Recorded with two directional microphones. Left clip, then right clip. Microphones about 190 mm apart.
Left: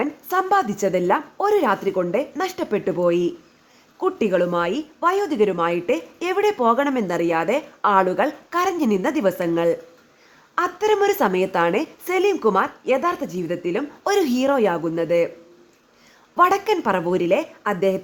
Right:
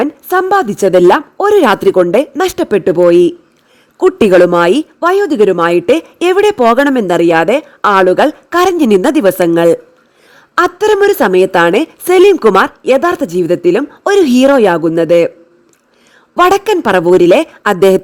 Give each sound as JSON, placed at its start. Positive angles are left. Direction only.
{"t": 0.0, "sound": "a woman's voice", "side_deg": -45}
{"t": 4.9, "sound": "a woman's voice", "side_deg": -45}
{"t": 16.3, "sound": "a woman's voice", "side_deg": -45}